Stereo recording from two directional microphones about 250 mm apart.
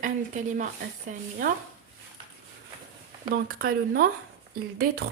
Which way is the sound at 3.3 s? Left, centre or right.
Right.